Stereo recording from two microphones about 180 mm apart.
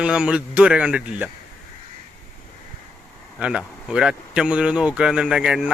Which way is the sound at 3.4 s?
5° right (ahead or behind).